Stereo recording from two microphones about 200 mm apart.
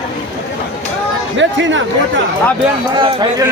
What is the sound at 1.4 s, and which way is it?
Speech, 70° right (ahead or behind).